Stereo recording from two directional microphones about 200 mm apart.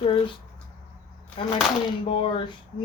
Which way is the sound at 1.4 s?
25° left (ahead or behind).